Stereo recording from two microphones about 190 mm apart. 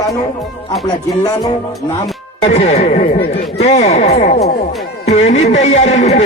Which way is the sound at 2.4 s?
35° left (ahead or behind).